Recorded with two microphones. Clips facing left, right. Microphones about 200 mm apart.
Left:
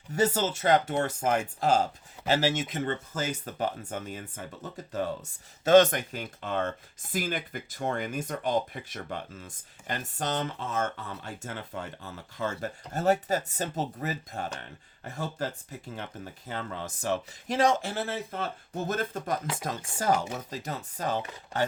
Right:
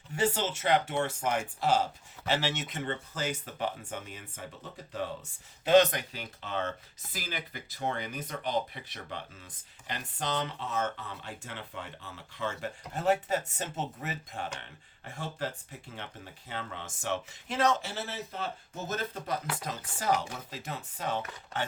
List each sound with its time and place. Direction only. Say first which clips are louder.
0.1 s speech: left 4 dB; 40° left (ahead or behind)
15.0 s chopping: left 4 dB; 40° left (ahead or behind)
16.0 s speech: left 5 dB; 45° left (ahead or behind)
19.6 s chopping: left 4 dB; 45° left (ahead or behind)